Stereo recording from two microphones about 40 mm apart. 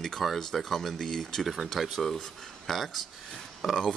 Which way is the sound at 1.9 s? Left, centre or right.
Centre.